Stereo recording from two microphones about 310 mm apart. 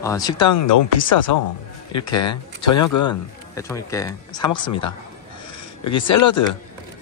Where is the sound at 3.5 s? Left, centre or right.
Centre.